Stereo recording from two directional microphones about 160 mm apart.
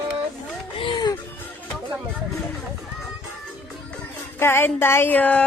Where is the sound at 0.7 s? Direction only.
30° left (ahead or behind).